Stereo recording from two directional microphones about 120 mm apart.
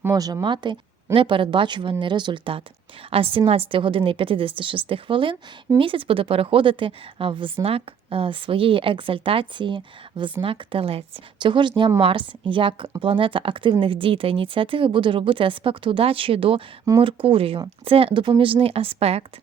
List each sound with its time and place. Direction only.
0.0 s a woman's voice: 30° right (ahead or behind); by 19.2 s 55° right (ahead or behind)